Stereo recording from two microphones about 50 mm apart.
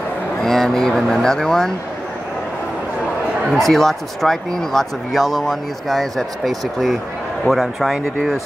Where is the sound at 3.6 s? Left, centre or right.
Centre.